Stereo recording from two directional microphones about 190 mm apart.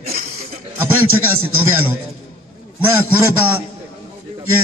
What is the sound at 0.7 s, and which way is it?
A man's voice, 10° right (ahead or behind).